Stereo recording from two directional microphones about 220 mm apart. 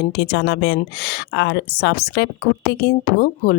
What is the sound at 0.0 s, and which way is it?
Speech, 50° left (ahead or behind).